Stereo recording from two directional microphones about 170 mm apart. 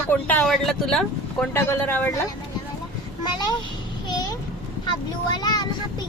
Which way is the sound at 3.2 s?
25° left (ahead or behind).